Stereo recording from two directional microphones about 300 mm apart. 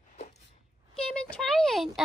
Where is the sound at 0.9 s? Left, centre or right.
Centre.